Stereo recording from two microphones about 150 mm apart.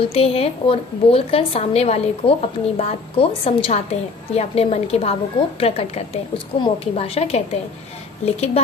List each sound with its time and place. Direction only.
0.0 s a woman's voice: 40° left (ahead or behind)